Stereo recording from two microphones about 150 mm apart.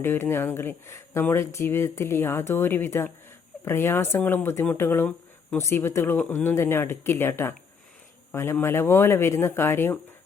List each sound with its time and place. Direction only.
0.0 s speech: 15° left (ahead or behind)